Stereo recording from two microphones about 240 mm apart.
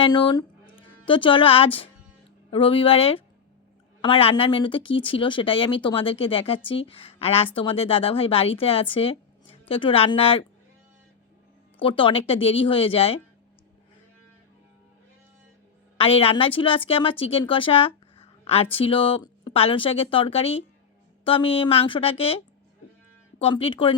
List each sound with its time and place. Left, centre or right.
0.0 s a woman's voice: centre
11.8 s a woman's voice: left
16.0 s a woman's voice: left
23.4 s a woman's voice: left